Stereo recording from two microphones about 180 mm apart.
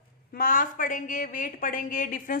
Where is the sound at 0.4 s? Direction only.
50° left (ahead or behind).